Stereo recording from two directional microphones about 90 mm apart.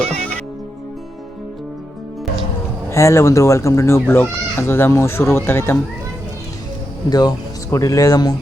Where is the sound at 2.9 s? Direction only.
30° left (ahead or behind).